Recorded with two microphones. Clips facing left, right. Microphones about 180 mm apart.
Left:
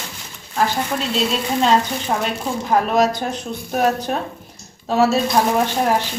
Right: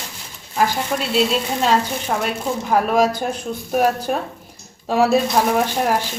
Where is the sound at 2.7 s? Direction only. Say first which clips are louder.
Even; 10° right (ahead or behind).